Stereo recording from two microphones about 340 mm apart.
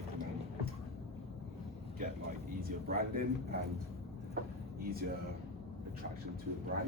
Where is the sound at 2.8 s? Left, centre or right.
Right.